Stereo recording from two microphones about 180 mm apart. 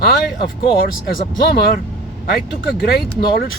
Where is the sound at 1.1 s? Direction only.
60° left (ahead or behind).